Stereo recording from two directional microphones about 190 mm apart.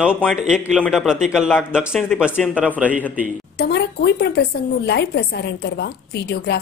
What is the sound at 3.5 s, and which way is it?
Speech, 60° left (ahead or behind).